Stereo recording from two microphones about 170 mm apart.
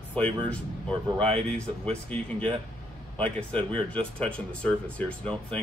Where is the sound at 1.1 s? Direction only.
35° right (ahead or behind).